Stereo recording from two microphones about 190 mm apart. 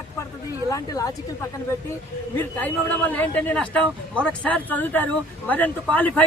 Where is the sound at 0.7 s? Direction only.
20° left (ahead or behind).